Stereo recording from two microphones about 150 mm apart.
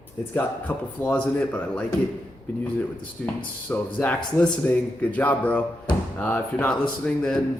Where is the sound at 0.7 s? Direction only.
10° left (ahead or behind).